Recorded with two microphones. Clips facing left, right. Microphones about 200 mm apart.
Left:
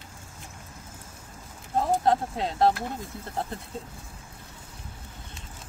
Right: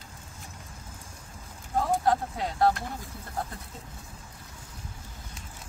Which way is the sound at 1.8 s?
25° left (ahead or behind).